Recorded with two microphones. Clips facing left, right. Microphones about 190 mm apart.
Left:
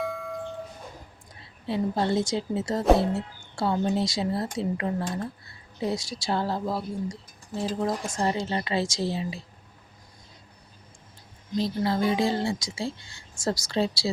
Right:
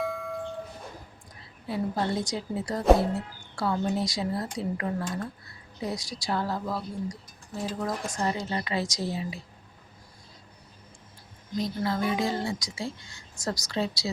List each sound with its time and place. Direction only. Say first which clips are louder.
0.0 s a sound: even; centre (ahead or behind)
1.6 s speech: left 3 dB; 25° left (ahead or behind)
11.5 s speech: left 3 dB; 30° left (ahead or behind)